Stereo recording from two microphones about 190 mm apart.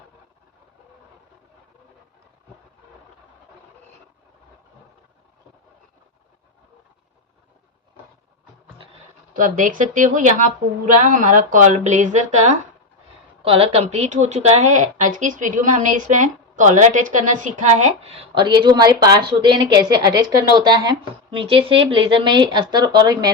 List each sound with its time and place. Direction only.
9.3 s a woman's voice: 45° right (ahead or behind); by 23.3 s 20° right (ahead or behind)